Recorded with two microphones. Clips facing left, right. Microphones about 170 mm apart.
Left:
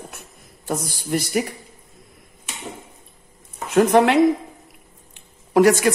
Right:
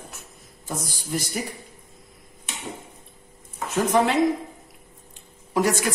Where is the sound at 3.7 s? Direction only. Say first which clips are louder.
Left 6 dB; 65° left (ahead or behind).